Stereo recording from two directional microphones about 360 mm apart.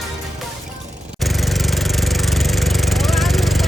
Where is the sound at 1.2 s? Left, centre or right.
Centre.